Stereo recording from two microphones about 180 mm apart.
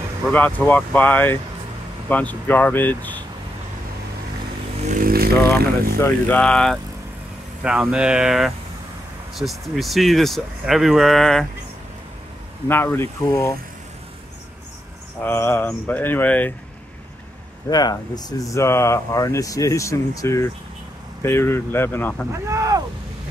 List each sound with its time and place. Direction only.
0.3 s speech: 10° left (ahead or behind)
4.8 s motorcycle: 50° right (ahead or behind)
6.2 s speech: 5° left (ahead or behind)
12.6 s speech: 10° left (ahead or behind)
15.2 s speech: 15° left (ahead or behind)
17.6 s speech: 20° left (ahead or behind)
22.5 s speech: 15° right (ahead or behind)